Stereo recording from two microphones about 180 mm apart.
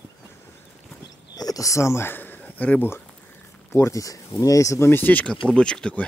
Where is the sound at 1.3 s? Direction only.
20° left (ahead or behind).